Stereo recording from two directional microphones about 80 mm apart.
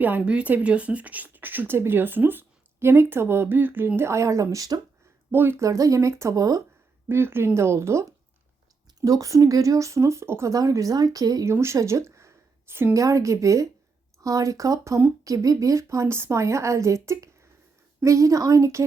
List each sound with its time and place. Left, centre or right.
0.0 s speech: centre; by 4.8 s right
5.3 s speech: right
5.6 s speech: right
7.1 s speech: right
9.0 s speech: right
10.5 s speech: right
11.4 s a woman's voice: right
13.0 s speech: right